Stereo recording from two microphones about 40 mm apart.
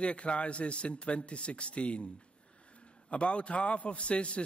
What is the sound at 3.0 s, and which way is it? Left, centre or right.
A man's voice, left.